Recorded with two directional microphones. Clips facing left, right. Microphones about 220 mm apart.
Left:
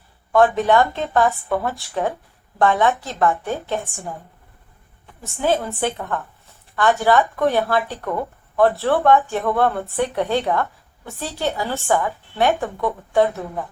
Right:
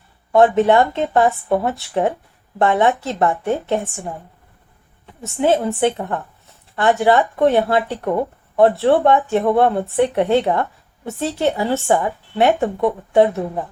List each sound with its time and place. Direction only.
0.7 s a woman's voice: 25° right (ahead or behind)
5.4 s a woman's voice: 30° right (ahead or behind)